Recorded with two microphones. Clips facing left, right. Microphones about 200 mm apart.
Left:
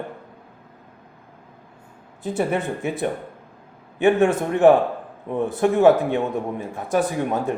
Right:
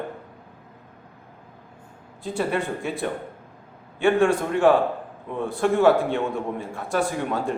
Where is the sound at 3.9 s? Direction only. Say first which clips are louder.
Left 2 dB; 20° left (ahead or behind).